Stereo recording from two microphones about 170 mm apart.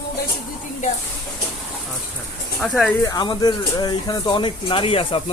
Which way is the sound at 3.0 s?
20° left (ahead or behind).